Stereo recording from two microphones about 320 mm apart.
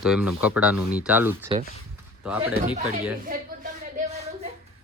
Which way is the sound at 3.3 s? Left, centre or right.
Right.